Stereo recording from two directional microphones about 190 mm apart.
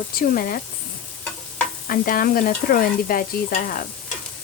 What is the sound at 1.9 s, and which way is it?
Stir, 50° left (ahead or behind).